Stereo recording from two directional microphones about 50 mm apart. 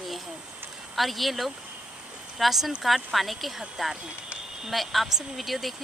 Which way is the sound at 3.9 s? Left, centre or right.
Centre.